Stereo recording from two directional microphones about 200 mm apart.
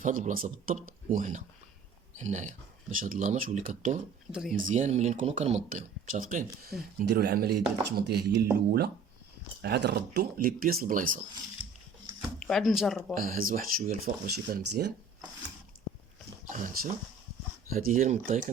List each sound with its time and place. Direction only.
0.0 s speech: 40° right (ahead or behind)
4.3 s speech: 5° right (ahead or behind)
4.5 s speech: 40° right (ahead or behind)
7.0 s speech: 55° right (ahead or behind)
9.6 s speech: 55° right (ahead or behind)
12.4 s speech: centre (ahead or behind)
13.1 s speech: 45° right (ahead or behind)
16.5 s speech: 40° right (ahead or behind)